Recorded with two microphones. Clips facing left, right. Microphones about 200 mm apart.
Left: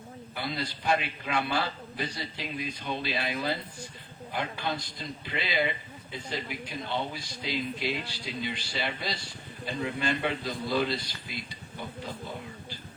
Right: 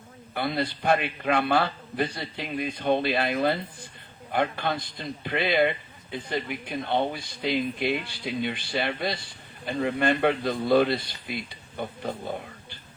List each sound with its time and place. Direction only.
0.3 s a man's voice: 60° right (ahead or behind)